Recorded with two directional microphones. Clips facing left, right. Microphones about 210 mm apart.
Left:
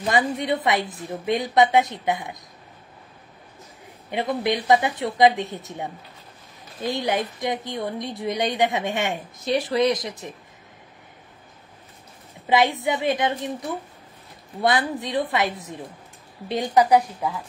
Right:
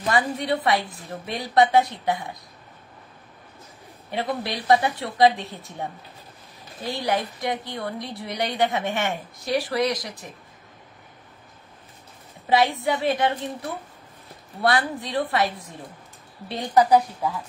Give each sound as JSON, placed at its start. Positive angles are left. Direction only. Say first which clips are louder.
{"t": 0.1, "sound": "a woman's voice", "louder": "left 1 dB", "side_deg": 20}
{"t": 4.1, "sound": "a woman's voice", "louder": "left 4 dB", "side_deg": 20}
{"t": 6.9, "sound": "a woman's voice", "louder": "left 1 dB", "side_deg": 20}
{"t": 12.8, "sound": "a woman's voice", "louder": "even", "side_deg": 20}